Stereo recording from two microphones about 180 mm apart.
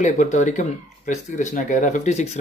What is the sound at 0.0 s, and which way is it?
A man's voice, 40° left (ahead or behind).